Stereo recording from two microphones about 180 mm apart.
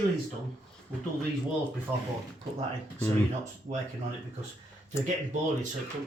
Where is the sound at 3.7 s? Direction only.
45° right (ahead or behind).